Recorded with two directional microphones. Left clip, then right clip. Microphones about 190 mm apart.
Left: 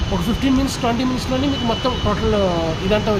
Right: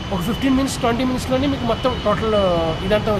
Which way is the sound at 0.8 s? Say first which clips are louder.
Right 2 dB; 20° right (ahead or behind).